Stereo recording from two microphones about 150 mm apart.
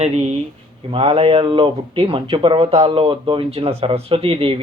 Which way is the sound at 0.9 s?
35° right (ahead or behind).